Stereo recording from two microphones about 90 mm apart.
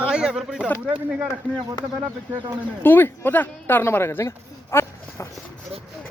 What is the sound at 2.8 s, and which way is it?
Speech, 25° left (ahead or behind).